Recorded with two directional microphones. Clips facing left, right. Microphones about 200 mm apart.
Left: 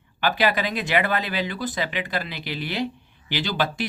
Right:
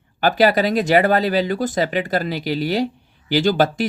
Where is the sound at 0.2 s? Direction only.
40° right (ahead or behind).